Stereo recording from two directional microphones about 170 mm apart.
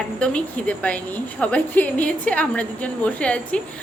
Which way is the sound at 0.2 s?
5° left (ahead or behind).